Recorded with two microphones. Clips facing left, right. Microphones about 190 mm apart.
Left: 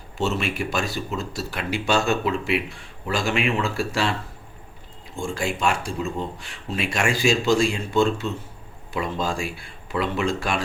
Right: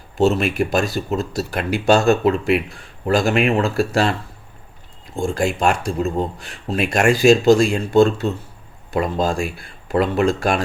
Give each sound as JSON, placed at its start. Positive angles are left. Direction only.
{"t": 0.2, "sound": "speech", "side_deg": -40}
{"t": 5.1, "sound": "speech", "side_deg": -45}